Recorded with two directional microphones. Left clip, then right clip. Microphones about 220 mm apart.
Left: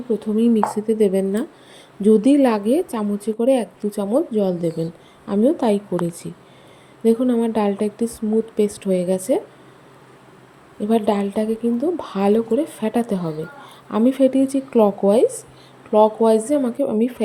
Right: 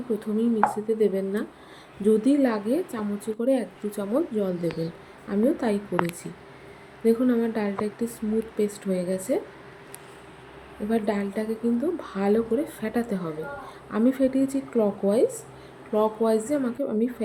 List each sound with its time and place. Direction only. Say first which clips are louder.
0.2 s a woman's voice: left 3 dB; 25° left (ahead or behind)
10.8 s a woman's voice: left 7 dB; 30° left (ahead or behind)